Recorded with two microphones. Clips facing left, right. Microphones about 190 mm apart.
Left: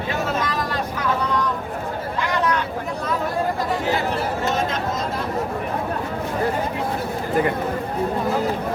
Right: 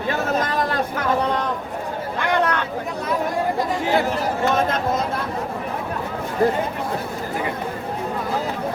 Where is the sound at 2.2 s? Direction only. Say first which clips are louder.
Right 2 dB; 60° right (ahead or behind).